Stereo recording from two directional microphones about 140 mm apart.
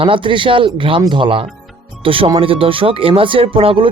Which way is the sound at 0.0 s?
40° right (ahead or behind).